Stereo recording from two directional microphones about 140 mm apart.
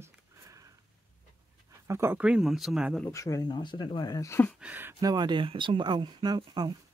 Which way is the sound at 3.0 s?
20° left (ahead or behind).